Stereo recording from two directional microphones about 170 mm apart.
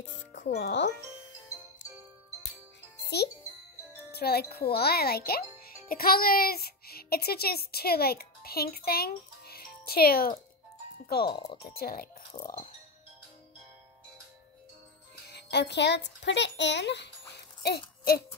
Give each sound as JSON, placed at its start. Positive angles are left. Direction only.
{"t": 0.0, "sound": "speech", "side_deg": 90}
{"t": 3.1, "sound": "a child's voice", "side_deg": 75}
{"t": 15.2, "sound": "a child's voice", "side_deg": 75}